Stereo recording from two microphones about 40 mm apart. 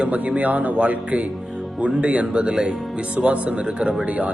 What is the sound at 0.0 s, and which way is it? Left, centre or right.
Speech, right.